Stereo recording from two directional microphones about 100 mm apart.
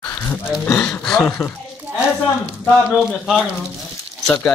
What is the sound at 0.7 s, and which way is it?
Speech, 15° left (ahead or behind).